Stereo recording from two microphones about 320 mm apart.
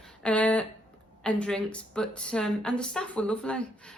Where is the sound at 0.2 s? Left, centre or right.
Centre.